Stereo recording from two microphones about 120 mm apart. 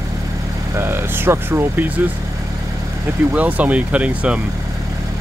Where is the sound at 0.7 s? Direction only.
20° right (ahead or behind).